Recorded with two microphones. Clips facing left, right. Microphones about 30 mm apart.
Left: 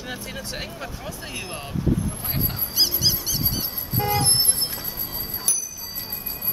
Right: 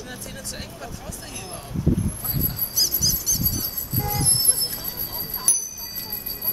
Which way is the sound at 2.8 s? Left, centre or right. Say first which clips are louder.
Left 2 dB; left.